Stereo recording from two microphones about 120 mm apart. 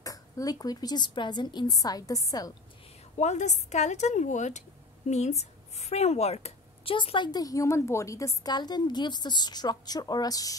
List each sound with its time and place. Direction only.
0.0 s a woman's voice: 30° left (ahead or behind)
3.2 s a woman's voice: 75° left (ahead or behind); by 10.5 s 30° left (ahead or behind)